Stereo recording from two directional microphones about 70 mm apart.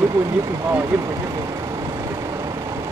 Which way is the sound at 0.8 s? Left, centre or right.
Right.